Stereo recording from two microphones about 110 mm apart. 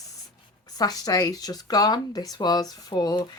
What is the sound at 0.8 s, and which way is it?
Speech, 35° left (ahead or behind).